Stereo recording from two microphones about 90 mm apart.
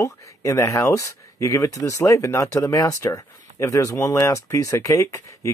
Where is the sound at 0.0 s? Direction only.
35° left (ahead or behind).